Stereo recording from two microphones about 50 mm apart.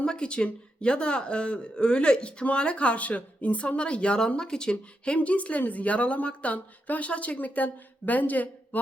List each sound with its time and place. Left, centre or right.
0.0 s speech: left